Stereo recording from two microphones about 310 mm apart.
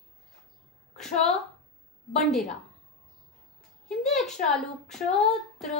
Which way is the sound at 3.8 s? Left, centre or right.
Centre.